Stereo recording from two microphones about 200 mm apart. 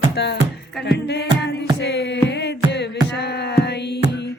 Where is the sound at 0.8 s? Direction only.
60° left (ahead or behind).